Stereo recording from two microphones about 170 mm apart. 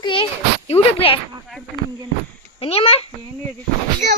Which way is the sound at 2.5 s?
35° left (ahead or behind).